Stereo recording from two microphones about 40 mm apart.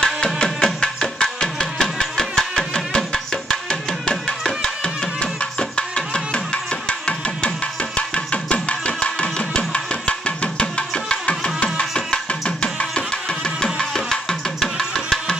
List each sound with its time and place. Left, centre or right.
0.0 s music: centre
4.1 s music: centre
4.8 s music: left
11.8 s music: centre
13.6 s music: centre